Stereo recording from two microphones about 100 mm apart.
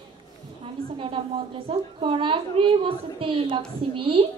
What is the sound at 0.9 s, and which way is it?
Speech, 60° right (ahead or behind).